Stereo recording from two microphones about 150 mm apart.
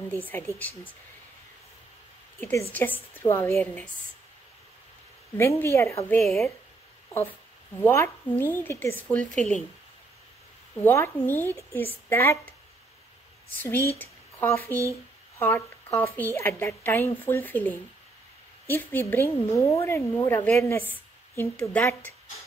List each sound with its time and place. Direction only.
0.1 s a woman's voice: 10° left (ahead or behind)
2.7 s a woman's voice: 15° left (ahead or behind)
5.4 s a woman's voice: 20° left (ahead or behind)
6.2 s speech: centre (ahead or behind)
7.8 s a woman's voice: 15° left (ahead or behind)
10.8 s a woman's voice: 15° left (ahead or behind)
13.6 s a woman's voice: 15° left (ahead or behind)